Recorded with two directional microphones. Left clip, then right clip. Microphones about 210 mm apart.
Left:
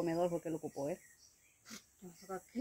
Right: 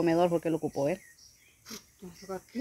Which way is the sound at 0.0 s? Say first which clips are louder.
Right 10 dB; 55° right (ahead or behind).